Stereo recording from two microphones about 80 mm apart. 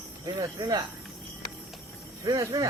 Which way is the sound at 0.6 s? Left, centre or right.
Right.